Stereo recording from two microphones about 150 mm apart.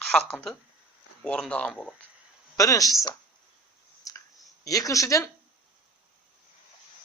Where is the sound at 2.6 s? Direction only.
25° left (ahead or behind).